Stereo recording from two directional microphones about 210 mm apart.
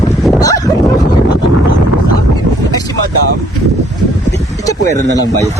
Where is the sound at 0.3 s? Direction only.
15° left (ahead or behind).